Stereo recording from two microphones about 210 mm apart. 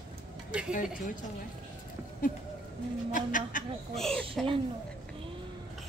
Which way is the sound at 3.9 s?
Centre (ahead or behind).